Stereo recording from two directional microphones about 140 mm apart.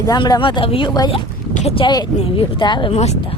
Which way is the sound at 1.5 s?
55° left (ahead or behind).